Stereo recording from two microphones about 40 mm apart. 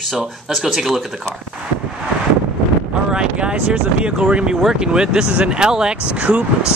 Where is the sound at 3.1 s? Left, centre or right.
Right.